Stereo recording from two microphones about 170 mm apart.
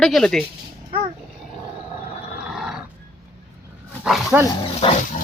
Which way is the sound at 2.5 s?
5° right (ahead or behind).